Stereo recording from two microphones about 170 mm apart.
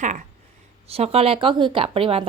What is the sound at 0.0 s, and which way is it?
A woman's voice, 45° right (ahead or behind).